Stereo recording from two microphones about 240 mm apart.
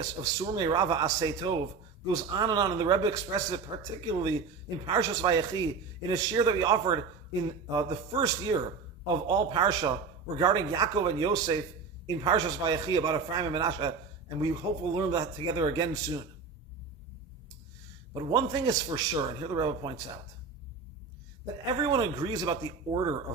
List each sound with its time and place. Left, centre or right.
0.0 s a man's voice: centre
14.9 s a man's voice: centre
18.1 s a man's voice: centre
21.8 s a man's voice: centre